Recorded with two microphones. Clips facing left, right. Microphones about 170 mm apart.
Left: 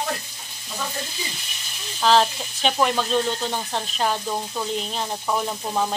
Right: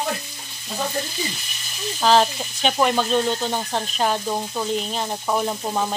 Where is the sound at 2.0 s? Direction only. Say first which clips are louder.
Right 1 dB; 5° right (ahead or behind).